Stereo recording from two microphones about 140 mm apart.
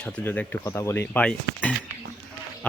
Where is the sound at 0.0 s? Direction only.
10° left (ahead or behind).